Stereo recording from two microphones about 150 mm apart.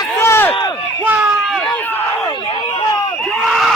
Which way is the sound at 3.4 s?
Centre (ahead or behind).